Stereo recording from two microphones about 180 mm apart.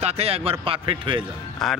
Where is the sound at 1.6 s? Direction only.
Centre (ahead or behind).